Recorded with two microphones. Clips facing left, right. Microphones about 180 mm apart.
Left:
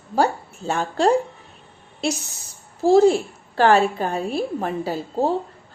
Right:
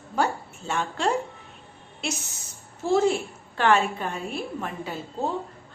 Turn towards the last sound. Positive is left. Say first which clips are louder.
# left 8 dB
turn(degrees=35)  # may be behind; listen again after turning